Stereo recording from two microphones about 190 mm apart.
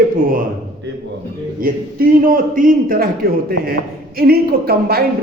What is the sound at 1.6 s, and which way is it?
A man's voice, 50° right (ahead or behind).